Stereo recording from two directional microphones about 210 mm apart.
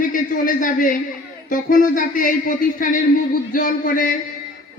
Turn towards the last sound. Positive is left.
turn(degrees=40)  # may be behind; listen again after turning